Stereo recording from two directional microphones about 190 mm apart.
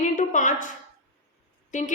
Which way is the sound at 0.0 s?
40° left (ahead or behind).